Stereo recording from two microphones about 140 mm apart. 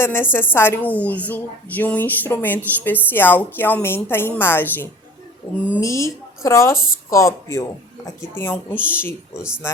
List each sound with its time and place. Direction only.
0.0 s a woman's voice: 15° left (ahead or behind)